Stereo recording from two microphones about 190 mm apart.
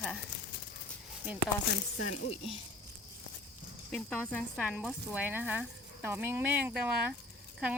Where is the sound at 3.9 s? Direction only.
5° left (ahead or behind).